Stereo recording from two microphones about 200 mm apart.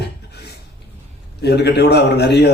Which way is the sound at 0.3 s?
55° left (ahead or behind).